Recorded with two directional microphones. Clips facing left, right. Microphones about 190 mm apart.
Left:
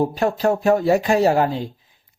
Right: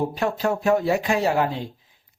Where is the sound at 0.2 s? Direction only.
40° left (ahead or behind).